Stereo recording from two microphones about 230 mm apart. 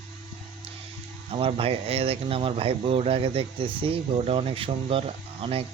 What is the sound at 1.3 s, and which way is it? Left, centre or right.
Speech, right.